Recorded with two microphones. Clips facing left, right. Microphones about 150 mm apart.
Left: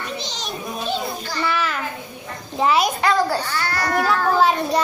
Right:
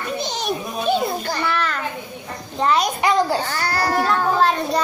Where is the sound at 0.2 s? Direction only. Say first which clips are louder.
Right 6 dB; 55° right (ahead or behind).